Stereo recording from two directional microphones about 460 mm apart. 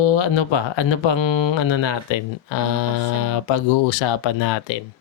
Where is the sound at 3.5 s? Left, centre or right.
Left.